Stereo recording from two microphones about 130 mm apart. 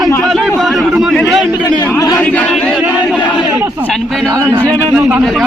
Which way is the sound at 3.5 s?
20° right (ahead or behind).